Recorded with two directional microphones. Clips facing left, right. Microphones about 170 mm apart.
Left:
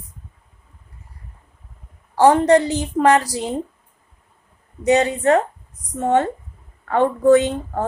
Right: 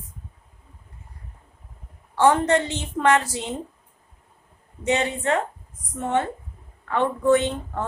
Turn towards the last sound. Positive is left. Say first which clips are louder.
# left 5 dB
turn(degrees=40)  # may be behind; listen again after turning